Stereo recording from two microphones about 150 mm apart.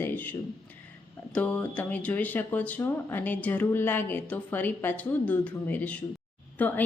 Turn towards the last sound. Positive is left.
turn(degrees=10)  # may be behind; listen again after turning